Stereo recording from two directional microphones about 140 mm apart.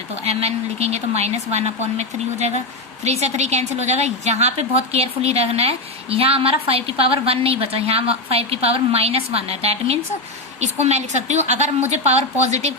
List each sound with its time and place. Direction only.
0.3 s a woman's voice: 45° right (ahead or behind)